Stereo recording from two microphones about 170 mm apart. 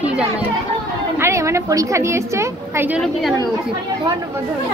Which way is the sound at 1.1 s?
15° right (ahead or behind).